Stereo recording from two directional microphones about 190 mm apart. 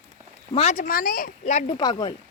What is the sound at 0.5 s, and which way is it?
Speech, 35° left (ahead or behind).